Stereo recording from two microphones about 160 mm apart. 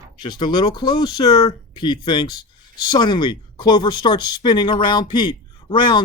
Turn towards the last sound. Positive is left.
turn(degrees=30)  # may be behind; listen again after turning